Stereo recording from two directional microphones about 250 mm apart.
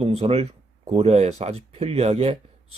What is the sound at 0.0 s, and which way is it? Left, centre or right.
A man's voice, right.